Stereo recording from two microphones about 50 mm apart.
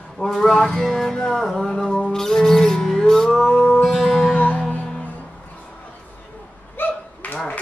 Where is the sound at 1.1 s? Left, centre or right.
Centre.